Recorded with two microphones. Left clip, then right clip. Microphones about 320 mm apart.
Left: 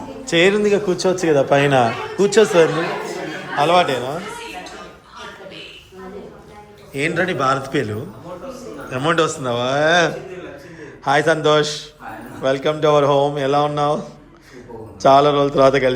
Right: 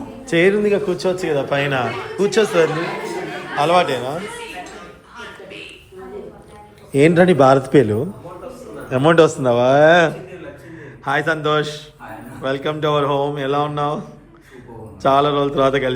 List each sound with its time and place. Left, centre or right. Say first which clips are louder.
0.3 s speech: even; centre
6.9 s a man's voice: right 7 dB; centre
15.0 s speech: left 3 dB; centre